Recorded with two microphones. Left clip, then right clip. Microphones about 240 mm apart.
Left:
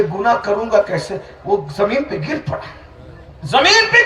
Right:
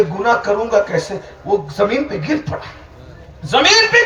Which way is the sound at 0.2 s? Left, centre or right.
Left.